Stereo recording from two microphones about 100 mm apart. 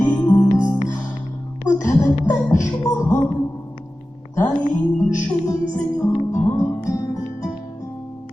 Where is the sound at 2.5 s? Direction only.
30° left (ahead or behind).